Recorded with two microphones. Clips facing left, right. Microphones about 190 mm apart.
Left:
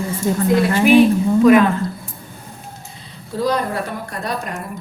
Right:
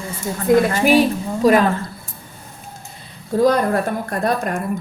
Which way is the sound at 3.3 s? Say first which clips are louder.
Right 5 dB; 45° right (ahead or behind).